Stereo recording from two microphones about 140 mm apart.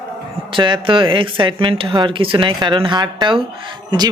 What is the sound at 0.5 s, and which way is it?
A woman's voice, 35° right (ahead or behind).